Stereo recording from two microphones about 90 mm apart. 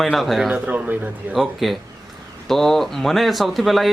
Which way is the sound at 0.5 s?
15° right (ahead or behind).